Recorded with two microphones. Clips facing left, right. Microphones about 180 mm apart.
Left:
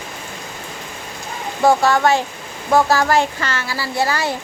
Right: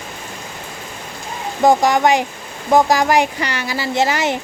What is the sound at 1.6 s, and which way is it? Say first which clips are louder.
Speech: right 1 dB; 15° right (ahead or behind).